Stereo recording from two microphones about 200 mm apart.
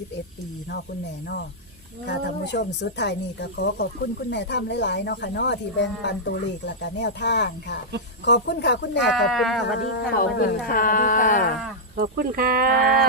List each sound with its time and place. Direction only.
2.0 s speech: 55° left (ahead or behind)
9.0 s speech: centre (ahead or behind)
9.7 s a sound: 50° left (ahead or behind)
11.9 s speech: 50° right (ahead or behind)